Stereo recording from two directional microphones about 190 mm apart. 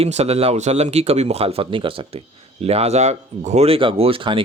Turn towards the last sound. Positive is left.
turn(degrees=-25)  # may be behind; listen again after turning